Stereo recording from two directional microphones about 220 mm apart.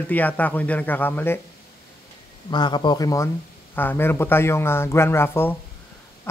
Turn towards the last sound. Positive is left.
turn(degrees=10)  # may be behind; listen again after turning